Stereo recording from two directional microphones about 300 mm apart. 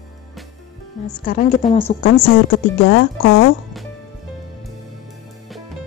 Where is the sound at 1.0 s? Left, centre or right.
Left.